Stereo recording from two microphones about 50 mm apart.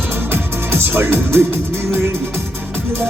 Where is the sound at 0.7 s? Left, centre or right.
Right.